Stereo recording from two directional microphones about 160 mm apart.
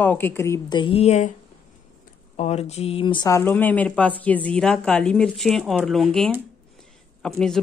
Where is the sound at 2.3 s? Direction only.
45° left (ahead or behind).